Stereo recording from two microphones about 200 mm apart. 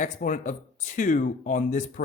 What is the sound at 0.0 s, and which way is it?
Speech, 40° left (ahead or behind).